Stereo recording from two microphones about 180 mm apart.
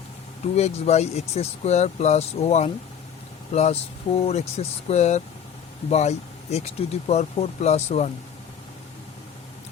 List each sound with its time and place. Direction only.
0.4 s speech: 35° left (ahead or behind)